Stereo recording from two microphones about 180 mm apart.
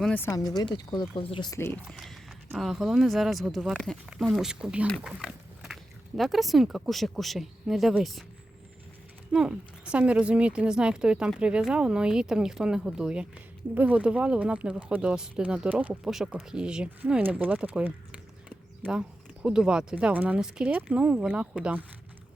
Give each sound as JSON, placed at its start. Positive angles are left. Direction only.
{"t": 0.0, "sound": "speech", "side_deg": 10}
{"t": 1.9, "sound": "speech", "side_deg": 0}
{"t": 9.3, "sound": "speech", "side_deg": -5}